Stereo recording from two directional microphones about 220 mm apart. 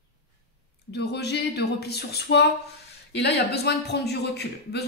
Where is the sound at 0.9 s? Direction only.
50° left (ahead or behind).